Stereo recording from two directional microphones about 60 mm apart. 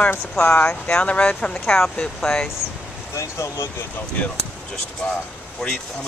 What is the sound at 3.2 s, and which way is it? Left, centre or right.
Speech, left.